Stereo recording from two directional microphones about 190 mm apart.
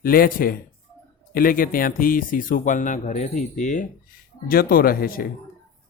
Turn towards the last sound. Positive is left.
turn(degrees=50)  # may be behind; listen again after turning